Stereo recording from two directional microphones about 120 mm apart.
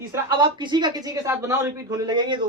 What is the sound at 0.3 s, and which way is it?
A woman's voice, 40° right (ahead or behind).